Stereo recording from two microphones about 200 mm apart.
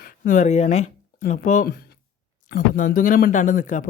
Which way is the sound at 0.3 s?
35° left (ahead or behind).